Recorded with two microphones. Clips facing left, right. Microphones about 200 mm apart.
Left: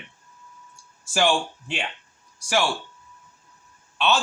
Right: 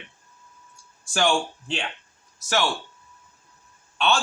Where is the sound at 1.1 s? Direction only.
5° left (ahead or behind).